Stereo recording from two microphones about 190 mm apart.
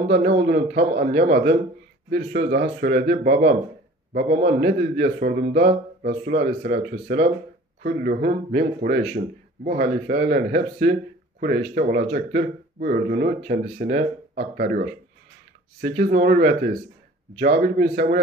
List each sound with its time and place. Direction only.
0.2 s a man's voice: 45° right (ahead or behind)
2.1 s a man's voice: 65° right (ahead or behind)
16.0 s a man's voice: 45° right (ahead or behind)